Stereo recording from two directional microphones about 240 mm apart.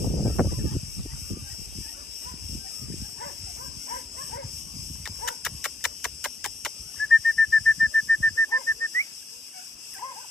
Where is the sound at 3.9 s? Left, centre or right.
Left.